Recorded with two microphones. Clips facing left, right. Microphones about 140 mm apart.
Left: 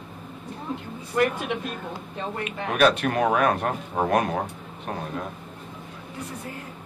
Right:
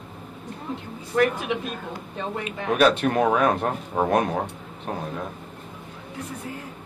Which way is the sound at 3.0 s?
25° right (ahead or behind).